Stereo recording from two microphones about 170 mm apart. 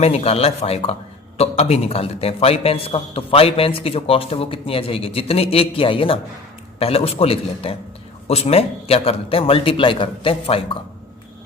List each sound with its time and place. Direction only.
0.0 s a man's voice: 35° left (ahead or behind)